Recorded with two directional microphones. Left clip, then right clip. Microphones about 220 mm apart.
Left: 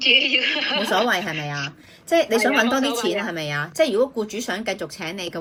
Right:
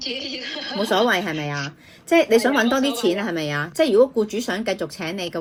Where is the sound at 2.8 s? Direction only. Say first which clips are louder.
Right 1 dB; 50° left (ahead or behind).